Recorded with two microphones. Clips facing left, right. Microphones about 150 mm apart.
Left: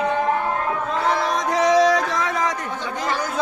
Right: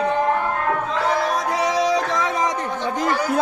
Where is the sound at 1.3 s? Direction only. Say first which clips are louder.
Left 4 dB; 10° right (ahead or behind).